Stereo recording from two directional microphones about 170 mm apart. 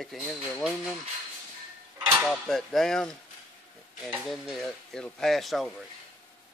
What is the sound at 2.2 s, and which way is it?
Speech, centre (ahead or behind).